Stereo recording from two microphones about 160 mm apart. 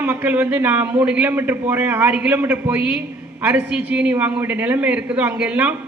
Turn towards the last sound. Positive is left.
turn(degrees=-10)  # may be behind; listen again after turning